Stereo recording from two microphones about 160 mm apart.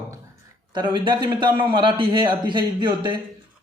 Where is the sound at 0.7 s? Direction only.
30° right (ahead or behind).